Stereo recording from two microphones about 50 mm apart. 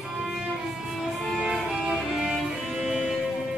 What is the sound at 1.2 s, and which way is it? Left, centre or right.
Music, centre.